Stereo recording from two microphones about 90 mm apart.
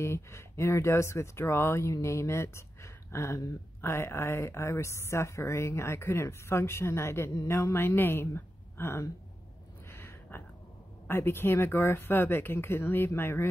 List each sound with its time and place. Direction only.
0.0 s a woman's voice: 30° left (ahead or behind)
9.8 s a sound: 25° left (ahead or behind)
11.1 s speech: 25° left (ahead or behind)